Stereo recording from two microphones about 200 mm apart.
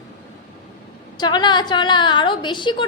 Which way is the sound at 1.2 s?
20° left (ahead or behind).